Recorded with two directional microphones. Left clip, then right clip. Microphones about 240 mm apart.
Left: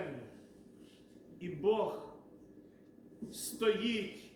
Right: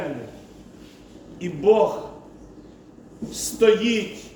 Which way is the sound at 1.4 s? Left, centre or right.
Centre.